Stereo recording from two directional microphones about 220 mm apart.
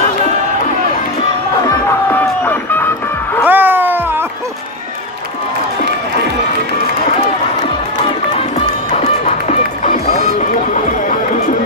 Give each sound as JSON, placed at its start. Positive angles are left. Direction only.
{"t": 1.9, "sound": "music", "side_deg": 10}
{"t": 3.4, "sound": "a sound", "side_deg": -10}
{"t": 8.9, "sound": "music", "side_deg": 30}